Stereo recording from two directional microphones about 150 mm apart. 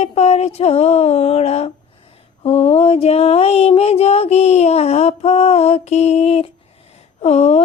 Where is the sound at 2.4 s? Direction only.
45° left (ahead or behind).